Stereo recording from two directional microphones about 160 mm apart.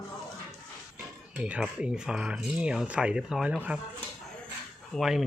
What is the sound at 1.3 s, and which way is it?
Speech, 5° right (ahead or behind).